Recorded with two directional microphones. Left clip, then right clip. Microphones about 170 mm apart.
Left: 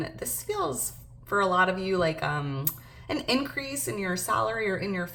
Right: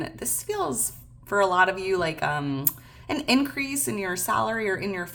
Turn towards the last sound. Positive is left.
turn(degrees=-35)  # may be behind; listen again after turning